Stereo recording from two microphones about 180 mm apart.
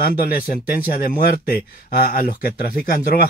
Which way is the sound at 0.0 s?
55° left (ahead or behind).